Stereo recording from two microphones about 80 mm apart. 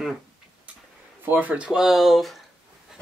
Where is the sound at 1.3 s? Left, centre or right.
Centre.